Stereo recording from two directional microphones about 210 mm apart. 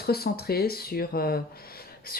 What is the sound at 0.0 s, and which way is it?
Speech, 50° left (ahead or behind).